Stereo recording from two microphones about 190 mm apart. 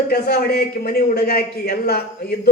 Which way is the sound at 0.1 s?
55° left (ahead or behind).